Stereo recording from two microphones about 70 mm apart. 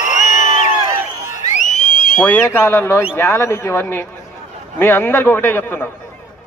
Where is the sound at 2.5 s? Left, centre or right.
Left.